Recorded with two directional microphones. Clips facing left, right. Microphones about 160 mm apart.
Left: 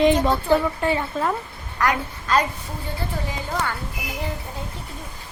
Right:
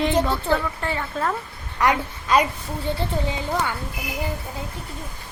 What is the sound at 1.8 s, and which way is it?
Speech, 20° right (ahead or behind).